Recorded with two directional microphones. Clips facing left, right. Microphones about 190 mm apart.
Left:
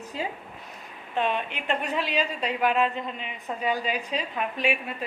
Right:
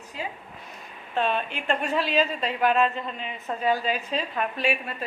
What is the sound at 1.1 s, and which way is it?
A woman's voice, 15° left (ahead or behind).